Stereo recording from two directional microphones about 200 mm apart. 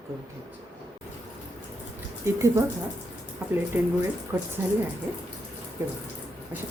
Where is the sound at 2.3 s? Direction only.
15° right (ahead or behind).